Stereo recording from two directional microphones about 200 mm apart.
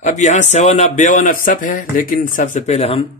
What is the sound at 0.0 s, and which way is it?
Speech, 40° left (ahead or behind).